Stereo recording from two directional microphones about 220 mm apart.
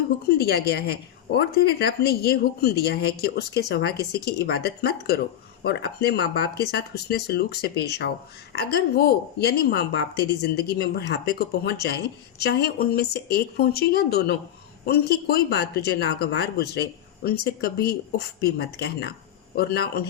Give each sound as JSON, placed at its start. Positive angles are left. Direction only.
{"t": 0.3, "sound": "a woman's voice", "side_deg": 45}